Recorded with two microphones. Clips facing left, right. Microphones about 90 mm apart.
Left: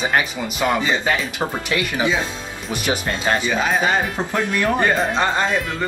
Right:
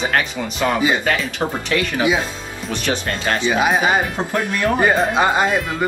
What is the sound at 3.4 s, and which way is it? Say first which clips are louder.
Speech: right 3 dB; 15° right (ahead or behind).